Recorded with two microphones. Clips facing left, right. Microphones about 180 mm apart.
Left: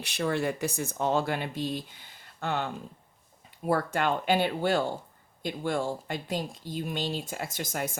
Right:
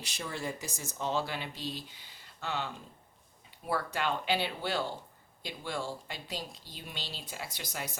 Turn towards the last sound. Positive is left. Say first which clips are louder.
# left 7 dB
turn(degrees=50)  # may be behind; listen again after turning